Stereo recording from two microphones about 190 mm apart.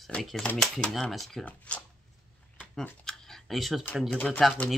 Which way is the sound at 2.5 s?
5° left (ahead or behind).